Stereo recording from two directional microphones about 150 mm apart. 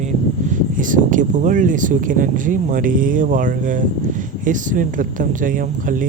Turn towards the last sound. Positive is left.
turn(degrees=-65)  # may be behind; listen again after turning